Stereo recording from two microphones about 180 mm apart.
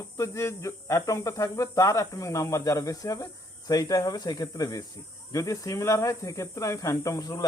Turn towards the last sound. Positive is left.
turn(degrees=20)  # may be behind; listen again after turning